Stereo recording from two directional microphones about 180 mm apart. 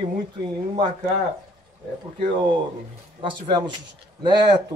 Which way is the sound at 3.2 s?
25° right (ahead or behind).